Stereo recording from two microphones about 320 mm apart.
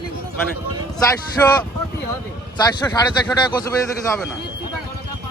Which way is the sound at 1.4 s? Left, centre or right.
Centre.